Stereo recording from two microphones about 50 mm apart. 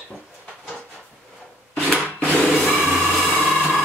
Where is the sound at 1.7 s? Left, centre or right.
Left.